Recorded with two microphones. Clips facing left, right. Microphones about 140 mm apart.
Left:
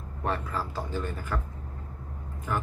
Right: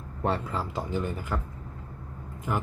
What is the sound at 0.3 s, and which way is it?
Speech, 20° right (ahead or behind).